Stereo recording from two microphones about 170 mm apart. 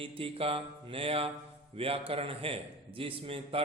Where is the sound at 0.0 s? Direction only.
35° right (ahead or behind).